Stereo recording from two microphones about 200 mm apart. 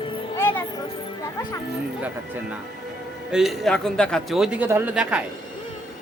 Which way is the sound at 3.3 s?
Centre (ahead or behind).